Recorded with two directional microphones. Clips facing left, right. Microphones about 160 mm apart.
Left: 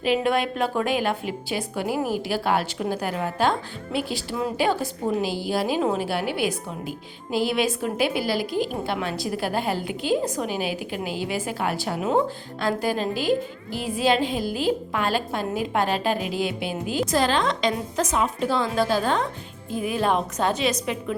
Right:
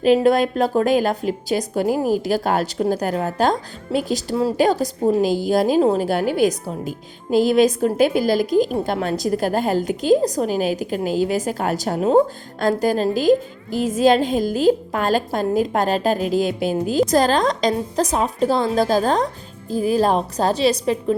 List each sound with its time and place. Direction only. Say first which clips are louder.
0.0 s a woman's voice: right 7 dB; 40° right (ahead or behind)